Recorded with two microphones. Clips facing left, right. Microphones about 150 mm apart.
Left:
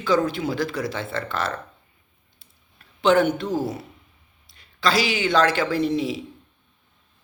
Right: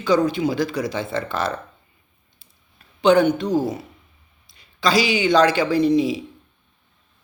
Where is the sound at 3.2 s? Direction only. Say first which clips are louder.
Right 4 dB; 5° left (ahead or behind).